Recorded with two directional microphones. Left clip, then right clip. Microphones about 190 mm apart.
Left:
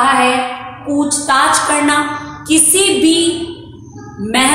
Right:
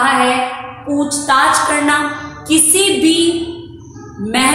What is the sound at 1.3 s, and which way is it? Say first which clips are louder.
A woman's voice: right 1 dB; 20° left (ahead or behind).